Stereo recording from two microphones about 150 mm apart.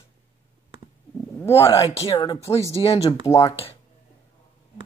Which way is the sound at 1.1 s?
15° left (ahead or behind).